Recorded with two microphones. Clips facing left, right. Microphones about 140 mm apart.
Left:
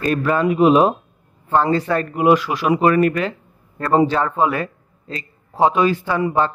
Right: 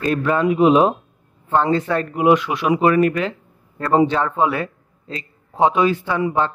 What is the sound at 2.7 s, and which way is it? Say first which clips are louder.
A man's voice: even; 10° right (ahead or behind).